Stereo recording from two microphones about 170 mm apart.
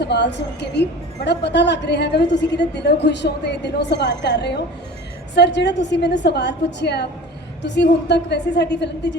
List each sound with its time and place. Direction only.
0.0 s a woman's voice: 85° left
5.3 s a woman's voice: 90° left
7.6 s a woman's voice: 90° left